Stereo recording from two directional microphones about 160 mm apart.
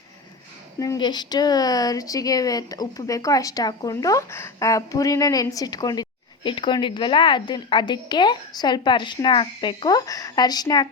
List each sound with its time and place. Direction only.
0.8 s speech: 25° left (ahead or behind)